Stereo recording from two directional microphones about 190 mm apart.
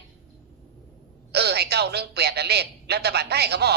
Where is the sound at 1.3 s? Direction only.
60° right (ahead or behind).